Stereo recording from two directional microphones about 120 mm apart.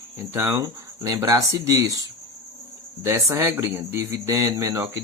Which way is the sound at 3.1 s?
25° right (ahead or behind).